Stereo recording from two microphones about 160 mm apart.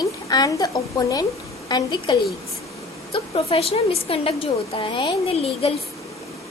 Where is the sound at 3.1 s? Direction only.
40° left (ahead or behind).